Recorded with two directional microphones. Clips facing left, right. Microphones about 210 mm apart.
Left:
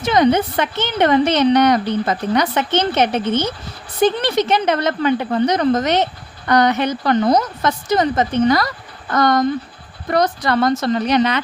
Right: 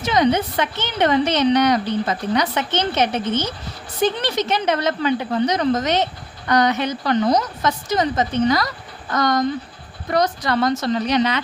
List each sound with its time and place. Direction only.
0.0 s a woman's voice: 55° left (ahead or behind)